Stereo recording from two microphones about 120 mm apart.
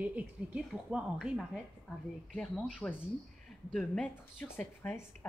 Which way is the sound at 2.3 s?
10° left (ahead or behind).